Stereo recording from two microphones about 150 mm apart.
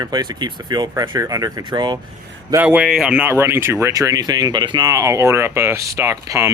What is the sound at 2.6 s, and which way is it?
Speech, 5° right (ahead or behind).